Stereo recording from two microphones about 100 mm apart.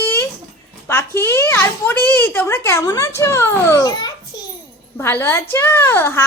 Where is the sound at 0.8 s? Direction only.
25° left (ahead or behind); by 4.4 s 45° left (ahead or behind).